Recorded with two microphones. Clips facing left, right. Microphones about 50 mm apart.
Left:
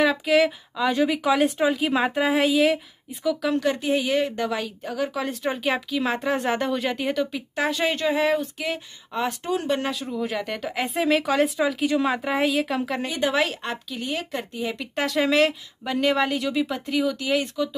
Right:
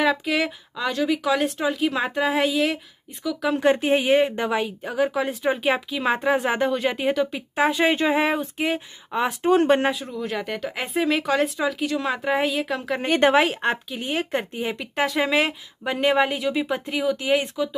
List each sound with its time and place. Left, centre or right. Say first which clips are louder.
0.0 s speech: left 2 dB; centre
0.9 s speech: even; centre
3.5 s a woman's voice: right 3 dB; right; by 7.4 s centre
7.5 s speech: right 4 dB; centre
9.1 s a woman's voice: right 3 dB; centre
9.5 s speech: right 9 dB; right
9.9 s speech: left 1 dB; centre
13.0 s speech: right 6 dB; right
13.3 s a woman's voice: right 5 dB; right
14.8 s a woman's voice: right 1 dB; centre
16.3 s a woman's voice: right 1 dB; centre